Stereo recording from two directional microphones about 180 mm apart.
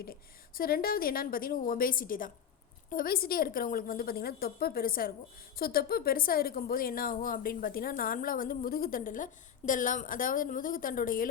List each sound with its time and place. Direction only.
0.0 s a woman's voice: 55° left (ahead or behind)